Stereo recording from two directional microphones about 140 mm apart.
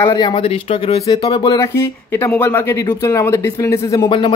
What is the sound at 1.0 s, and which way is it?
Speech, 25° left (ahead or behind).